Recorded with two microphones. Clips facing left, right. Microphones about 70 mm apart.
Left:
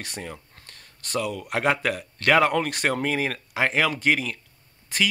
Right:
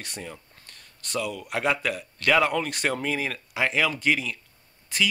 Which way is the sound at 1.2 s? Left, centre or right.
Left.